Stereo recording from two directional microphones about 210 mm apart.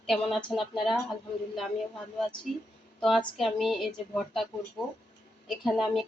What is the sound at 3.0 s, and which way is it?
Speech, centre (ahead or behind).